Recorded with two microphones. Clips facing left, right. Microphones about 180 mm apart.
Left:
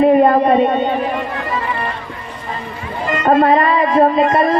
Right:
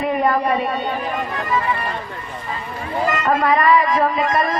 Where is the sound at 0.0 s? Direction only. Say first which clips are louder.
Left 8 dB; 30° left (ahead or behind).